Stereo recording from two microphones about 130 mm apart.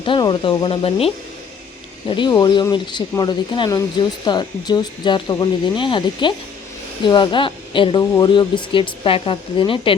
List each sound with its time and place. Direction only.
0.0 s speech: 40° left (ahead or behind)